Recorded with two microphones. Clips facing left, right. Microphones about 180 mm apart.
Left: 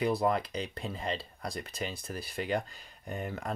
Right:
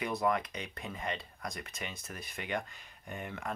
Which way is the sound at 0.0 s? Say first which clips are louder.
Left 3 dB; 30° left (ahead or behind).